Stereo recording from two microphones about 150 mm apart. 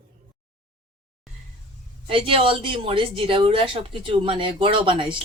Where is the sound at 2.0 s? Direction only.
35° right (ahead or behind).